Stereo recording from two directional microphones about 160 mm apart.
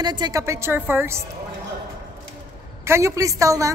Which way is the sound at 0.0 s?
25° right (ahead or behind).